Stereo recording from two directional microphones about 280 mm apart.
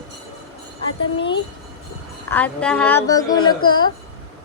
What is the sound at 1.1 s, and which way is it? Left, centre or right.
Speech, centre.